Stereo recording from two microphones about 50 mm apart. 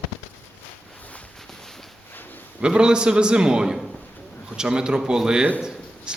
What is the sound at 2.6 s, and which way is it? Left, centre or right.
A man's voice, centre.